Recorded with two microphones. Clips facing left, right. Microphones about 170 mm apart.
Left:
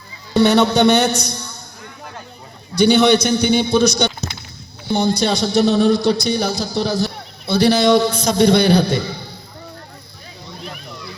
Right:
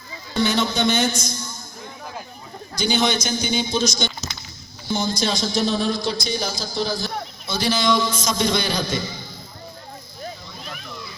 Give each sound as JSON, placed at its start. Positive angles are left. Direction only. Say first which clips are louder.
{"t": 0.3, "sound": "a man's voice", "louder": "left 8 dB", "side_deg": 65}
{"t": 2.7, "sound": "speech", "louder": "left 9 dB", "side_deg": 65}